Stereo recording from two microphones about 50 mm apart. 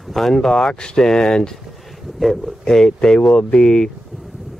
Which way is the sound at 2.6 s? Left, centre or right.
Centre.